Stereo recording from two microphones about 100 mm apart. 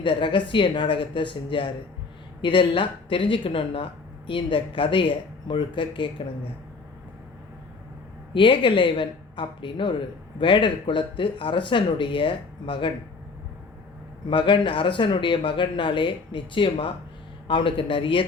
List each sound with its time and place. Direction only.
0.0 s speech: 60° left (ahead or behind)
8.3 s speech: 55° left (ahead or behind)
14.3 s speech: 55° left (ahead or behind)